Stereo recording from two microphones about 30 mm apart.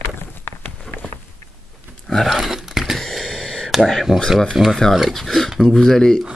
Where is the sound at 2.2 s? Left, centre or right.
Centre.